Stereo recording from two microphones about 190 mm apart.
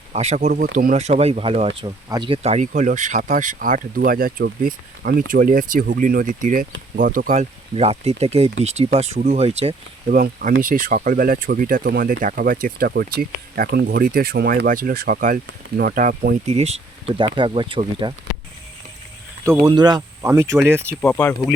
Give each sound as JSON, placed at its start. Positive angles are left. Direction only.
{"t": 0.1, "sound": "speech", "side_deg": -35}
{"t": 1.0, "sound": "speech", "side_deg": -30}
{"t": 7.3, "sound": "speech", "side_deg": -35}
{"t": 10.2, "sound": "speech", "side_deg": -50}
{"t": 19.6, "sound": "speech", "side_deg": -20}
{"t": 21.0, "sound": "speech", "side_deg": 5}